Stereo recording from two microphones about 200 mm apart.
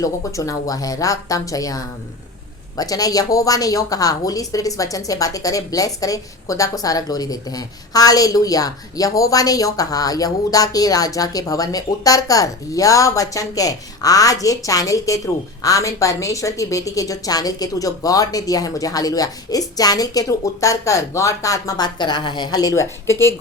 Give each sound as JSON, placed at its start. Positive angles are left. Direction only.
{"t": 0.0, "sound": "a woman's voice", "side_deg": 15}